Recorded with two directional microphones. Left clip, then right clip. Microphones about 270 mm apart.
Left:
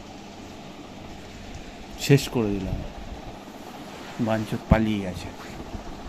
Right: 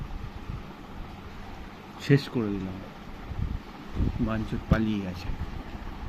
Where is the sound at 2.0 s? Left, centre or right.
Centre.